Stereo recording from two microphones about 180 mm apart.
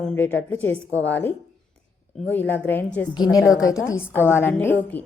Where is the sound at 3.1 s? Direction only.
20° left (ahead or behind).